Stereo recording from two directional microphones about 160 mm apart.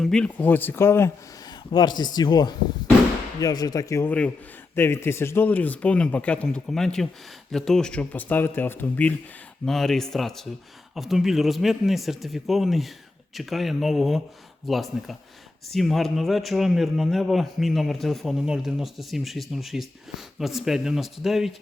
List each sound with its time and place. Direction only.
0.0 s speech: 5° left (ahead or behind)
1.7 s a man's voice: 25° left (ahead or behind); by 21.5 s centre (ahead or behind)